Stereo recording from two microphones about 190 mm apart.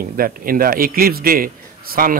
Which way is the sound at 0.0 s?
50° right (ahead or behind).